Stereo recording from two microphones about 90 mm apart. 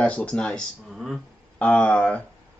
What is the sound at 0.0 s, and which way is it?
Speech, 15° left (ahead or behind).